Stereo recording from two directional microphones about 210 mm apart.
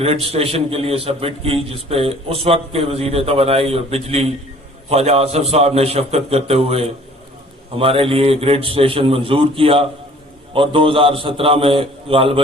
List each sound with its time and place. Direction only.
0.0 s a man's voice: 30° right (ahead or behind)